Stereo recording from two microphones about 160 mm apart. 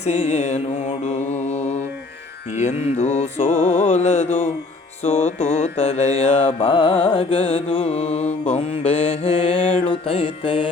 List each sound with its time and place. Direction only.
0.0 s mantra: 45° left (ahead or behind)
2.6 s music: 45° left (ahead or behind)